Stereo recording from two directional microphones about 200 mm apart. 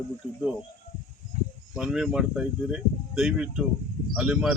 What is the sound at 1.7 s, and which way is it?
Speech, 5° right (ahead or behind).